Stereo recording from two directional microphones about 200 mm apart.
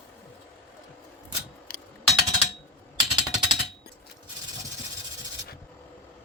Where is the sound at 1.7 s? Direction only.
50° left (ahead or behind).